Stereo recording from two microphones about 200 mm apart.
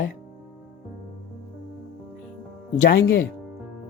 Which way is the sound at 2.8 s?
50° left (ahead or behind).